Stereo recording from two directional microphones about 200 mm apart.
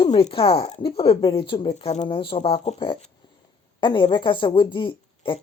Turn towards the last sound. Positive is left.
turn(degrees=25)  # may be behind; listen again after turning